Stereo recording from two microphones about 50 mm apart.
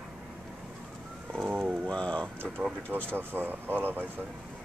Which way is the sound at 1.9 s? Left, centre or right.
Centre.